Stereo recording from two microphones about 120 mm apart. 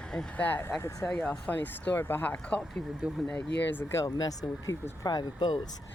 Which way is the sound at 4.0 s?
30° left (ahead or behind).